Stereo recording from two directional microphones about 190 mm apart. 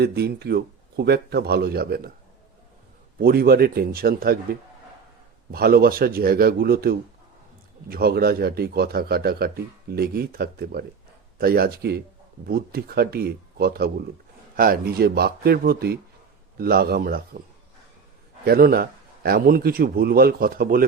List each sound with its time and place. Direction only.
0.0 s speech: 60° right (ahead or behind)
3.2 s a man's voice: 55° right (ahead or behind)
5.5 s a man's voice: 55° right (ahead or behind)
18.4 s a man's voice: 50° right (ahead or behind)